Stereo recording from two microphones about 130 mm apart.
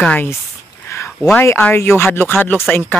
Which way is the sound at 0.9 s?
20° left (ahead or behind).